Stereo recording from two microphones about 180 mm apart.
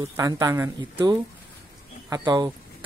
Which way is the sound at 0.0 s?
15° right (ahead or behind).